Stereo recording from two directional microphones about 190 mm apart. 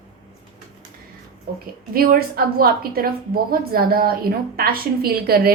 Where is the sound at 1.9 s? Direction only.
50° right (ahead or behind).